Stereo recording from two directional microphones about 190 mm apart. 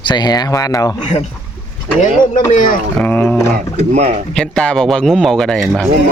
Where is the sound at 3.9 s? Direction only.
35° right (ahead or behind).